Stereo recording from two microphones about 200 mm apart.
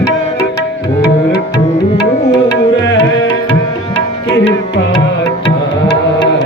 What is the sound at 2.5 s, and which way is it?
Music, 65° left (ahead or behind).